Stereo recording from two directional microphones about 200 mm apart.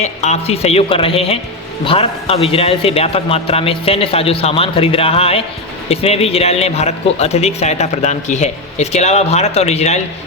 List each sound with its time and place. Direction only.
0.0 s a man's voice: 35° left (ahead or behind)